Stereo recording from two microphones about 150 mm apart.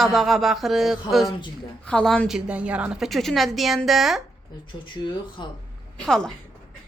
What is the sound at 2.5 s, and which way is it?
A woman's voice, 10° right (ahead or behind).